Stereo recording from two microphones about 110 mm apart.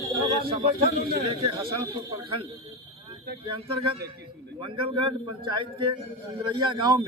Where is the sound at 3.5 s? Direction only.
50° right (ahead or behind).